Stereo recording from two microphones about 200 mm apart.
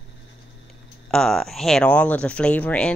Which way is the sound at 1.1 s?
5° left (ahead or behind).